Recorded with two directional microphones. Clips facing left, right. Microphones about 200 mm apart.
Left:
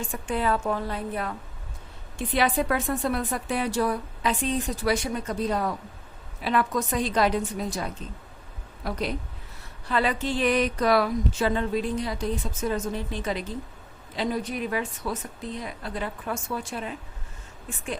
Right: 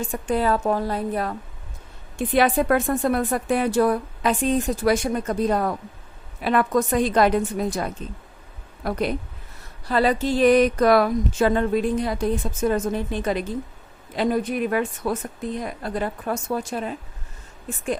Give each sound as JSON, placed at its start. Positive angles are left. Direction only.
{"t": 0.0, "sound": "a woman's voice", "side_deg": -40}
{"t": 2.1, "sound": "a woman's voice", "side_deg": -50}
{"t": 9.8, "sound": "a woman's voice", "side_deg": -40}